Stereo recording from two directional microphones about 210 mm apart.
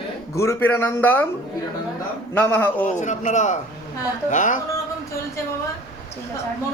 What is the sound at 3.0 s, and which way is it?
A man's voice, 35° left (ahead or behind).